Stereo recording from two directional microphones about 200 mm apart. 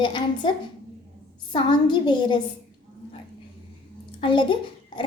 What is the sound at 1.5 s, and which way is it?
Speech, 25° left (ahead or behind).